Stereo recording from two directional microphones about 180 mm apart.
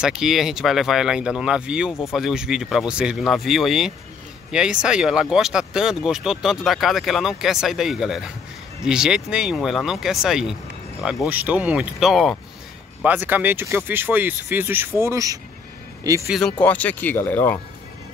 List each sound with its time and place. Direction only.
0.0 s speech: 5° right (ahead or behind)
16.3 s speech: centre (ahead or behind)